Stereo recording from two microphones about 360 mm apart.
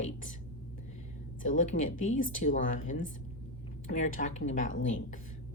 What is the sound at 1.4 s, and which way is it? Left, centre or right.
Speech, left.